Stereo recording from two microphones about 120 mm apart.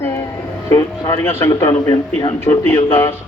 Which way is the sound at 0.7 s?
25° left (ahead or behind).